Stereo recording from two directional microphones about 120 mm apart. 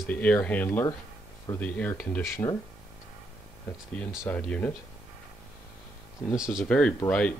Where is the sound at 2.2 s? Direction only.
25° left (ahead or behind).